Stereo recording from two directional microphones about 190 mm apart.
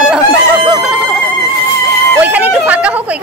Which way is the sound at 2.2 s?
10° right (ahead or behind).